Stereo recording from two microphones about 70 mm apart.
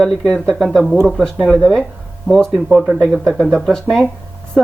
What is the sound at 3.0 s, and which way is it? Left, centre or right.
Speech, centre.